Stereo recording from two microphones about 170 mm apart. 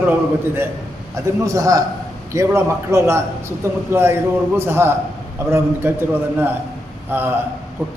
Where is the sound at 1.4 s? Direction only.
20° right (ahead or behind).